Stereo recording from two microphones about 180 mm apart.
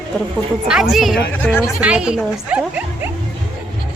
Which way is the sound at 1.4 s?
10° left (ahead or behind).